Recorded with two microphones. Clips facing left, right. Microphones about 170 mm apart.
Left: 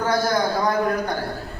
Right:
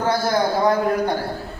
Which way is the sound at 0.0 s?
25° right (ahead or behind).